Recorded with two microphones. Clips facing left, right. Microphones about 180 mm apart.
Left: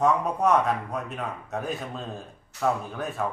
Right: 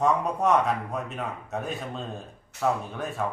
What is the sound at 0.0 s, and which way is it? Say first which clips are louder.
A man's voice: left 1 dB; centre (ahead or behind).